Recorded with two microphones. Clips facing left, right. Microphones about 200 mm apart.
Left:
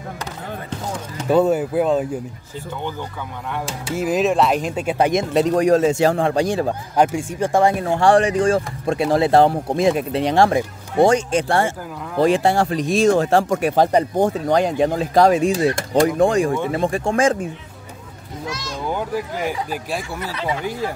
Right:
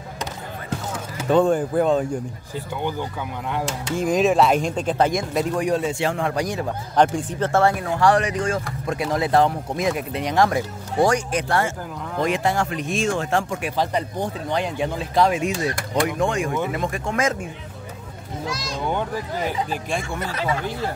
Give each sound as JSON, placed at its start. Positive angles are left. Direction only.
{"t": 0.7, "sound": "basketball bounce", "side_deg": -10}
{"t": 1.3, "sound": "speech", "side_deg": 5}
{"t": 3.6, "sound": "speech", "side_deg": 5}
{"t": 5.9, "sound": "speech", "side_deg": 40}
{"t": 7.0, "sound": "speech", "side_deg": 10}
{"t": 7.8, "sound": "speech", "side_deg": 30}
{"t": 18.8, "sound": "speech", "side_deg": 5}
{"t": 20.2, "sound": "speech", "side_deg": -45}
{"t": 20.4, "sound": "speech", "side_deg": 10}